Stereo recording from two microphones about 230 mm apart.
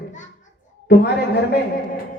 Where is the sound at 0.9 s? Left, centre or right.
Left.